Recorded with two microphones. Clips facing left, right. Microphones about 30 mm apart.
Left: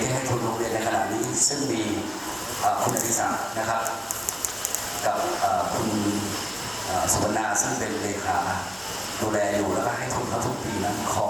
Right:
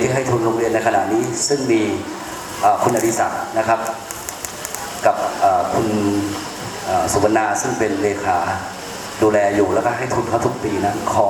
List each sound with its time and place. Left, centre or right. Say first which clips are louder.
0.0 s a sound: right 9 dB; right
2.6 s a man's voice: right 9 dB; right
5.0 s a man's voice: right 9 dB; right